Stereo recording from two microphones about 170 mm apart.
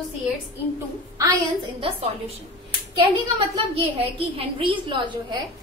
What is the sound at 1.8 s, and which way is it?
Speech, 35° right (ahead or behind).